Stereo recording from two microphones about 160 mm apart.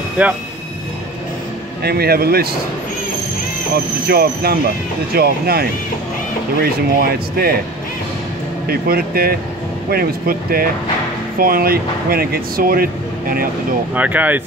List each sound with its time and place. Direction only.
0.2 s speech: 10° right (ahead or behind)
1.8 s speech: 75° right (ahead or behind)
4.1 s speech: 75° right (ahead or behind)
8.6 s speech: 70° right (ahead or behind)
13.9 s speech: 10° right (ahead or behind)